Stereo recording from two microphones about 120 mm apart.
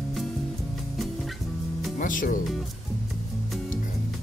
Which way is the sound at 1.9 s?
90° left.